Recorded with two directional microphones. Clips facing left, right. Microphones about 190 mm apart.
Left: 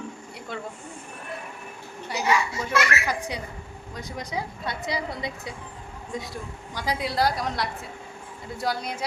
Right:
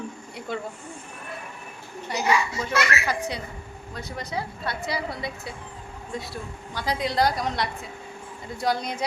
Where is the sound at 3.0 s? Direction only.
10° left (ahead or behind).